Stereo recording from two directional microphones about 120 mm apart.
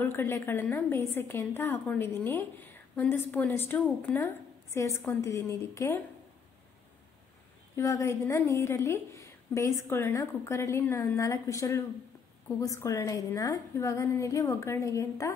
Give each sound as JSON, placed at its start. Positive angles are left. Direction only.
{"t": 0.0, "sound": "a woman's voice", "side_deg": 20}
{"t": 7.7, "sound": "a woman's voice", "side_deg": 25}